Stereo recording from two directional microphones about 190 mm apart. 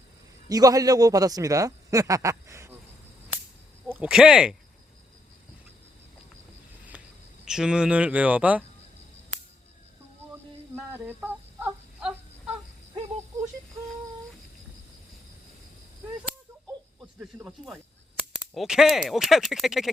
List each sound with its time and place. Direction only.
0.4 s a man's voice: 20° right (ahead or behind)
3.8 s speech: 5° right (ahead or behind)
6.9 s cricket: 10° right (ahead or behind)
7.4 s a man's voice: 5° right (ahead or behind)
10.8 s a sound: 10° right (ahead or behind)
17.0 s speech: 5° right (ahead or behind)